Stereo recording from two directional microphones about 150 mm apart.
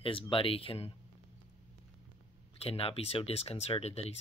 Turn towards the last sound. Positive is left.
turn(degrees=45)  # may be behind; listen again after turning